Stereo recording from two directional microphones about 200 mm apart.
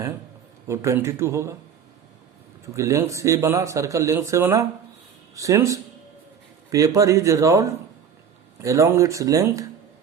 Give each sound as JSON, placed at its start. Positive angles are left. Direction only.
{"t": 0.7, "sound": "speech", "side_deg": -15}
{"t": 2.7, "sound": "speech", "side_deg": -15}